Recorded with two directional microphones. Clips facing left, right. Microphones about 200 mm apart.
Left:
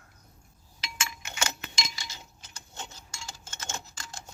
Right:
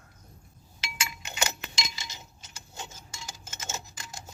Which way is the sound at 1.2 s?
20° right (ahead or behind).